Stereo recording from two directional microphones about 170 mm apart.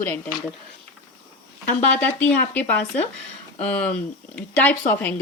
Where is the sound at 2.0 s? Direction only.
10° left (ahead or behind).